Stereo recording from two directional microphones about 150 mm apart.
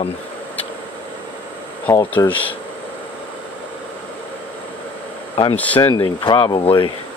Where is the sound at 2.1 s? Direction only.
10° left (ahead or behind).